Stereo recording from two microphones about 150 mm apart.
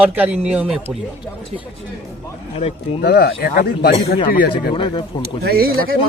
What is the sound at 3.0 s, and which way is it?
Speech, 90° left.